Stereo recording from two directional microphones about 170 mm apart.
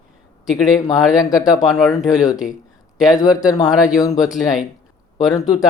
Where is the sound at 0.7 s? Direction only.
20° left (ahead or behind).